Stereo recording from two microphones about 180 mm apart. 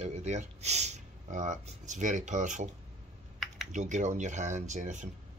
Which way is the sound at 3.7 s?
45° right (ahead or behind).